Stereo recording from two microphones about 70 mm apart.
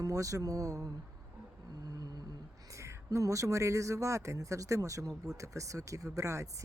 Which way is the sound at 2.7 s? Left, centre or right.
Right.